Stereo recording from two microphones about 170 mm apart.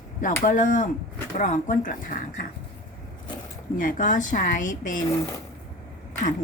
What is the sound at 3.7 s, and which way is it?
A woman's voice, 50° left (ahead or behind).